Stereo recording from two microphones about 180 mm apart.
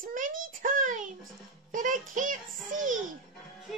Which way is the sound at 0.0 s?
50° right (ahead or behind).